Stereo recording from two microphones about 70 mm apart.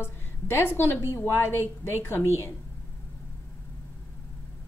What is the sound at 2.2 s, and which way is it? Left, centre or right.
Speech, left.